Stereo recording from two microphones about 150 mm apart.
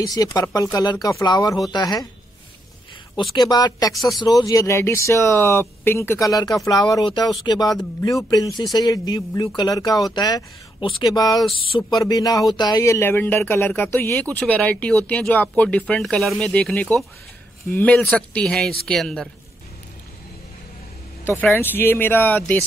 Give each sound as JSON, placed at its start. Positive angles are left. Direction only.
{"t": 0.0, "sound": "speech", "side_deg": 25}
{"t": 3.3, "sound": "a man's voice", "side_deg": 30}
{"t": 21.4, "sound": "speech", "side_deg": 10}